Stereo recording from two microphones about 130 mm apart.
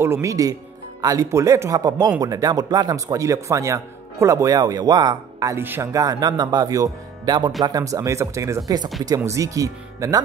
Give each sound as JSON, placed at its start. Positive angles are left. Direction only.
{"t": 0.0, "sound": "speech", "side_deg": -20}
{"t": 5.6, "sound": "speech", "side_deg": -15}
{"t": 5.9, "sound": "speech", "side_deg": -30}